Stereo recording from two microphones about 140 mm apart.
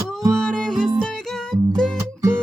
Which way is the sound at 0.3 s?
5° left (ahead or behind).